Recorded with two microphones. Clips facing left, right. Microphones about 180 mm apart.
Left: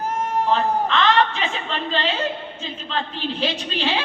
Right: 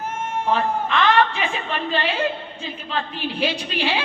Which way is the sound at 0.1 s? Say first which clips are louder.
Left 4 dB; 35° left (ahead or behind).